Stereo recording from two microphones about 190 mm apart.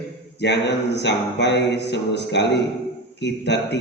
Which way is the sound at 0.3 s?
65° left (ahead or behind).